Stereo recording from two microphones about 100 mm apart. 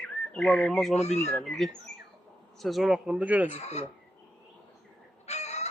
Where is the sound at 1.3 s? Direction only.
5° left (ahead or behind).